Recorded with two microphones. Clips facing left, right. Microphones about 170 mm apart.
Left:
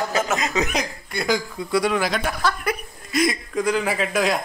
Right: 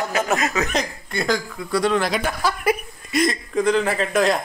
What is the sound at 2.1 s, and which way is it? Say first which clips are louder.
Speech: right 1 dB; 5° right (ahead or behind).